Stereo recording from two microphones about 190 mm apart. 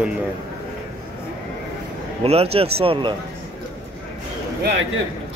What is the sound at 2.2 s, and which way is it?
Speech, 30° right (ahead or behind).